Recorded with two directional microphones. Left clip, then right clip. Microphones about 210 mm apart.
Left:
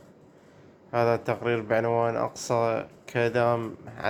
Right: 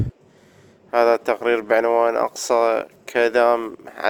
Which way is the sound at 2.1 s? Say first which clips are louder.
Right 8 dB; 45° right (ahead or behind).